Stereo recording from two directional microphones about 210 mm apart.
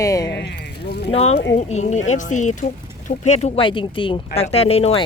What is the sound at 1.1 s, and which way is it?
Speech, 30° left (ahead or behind).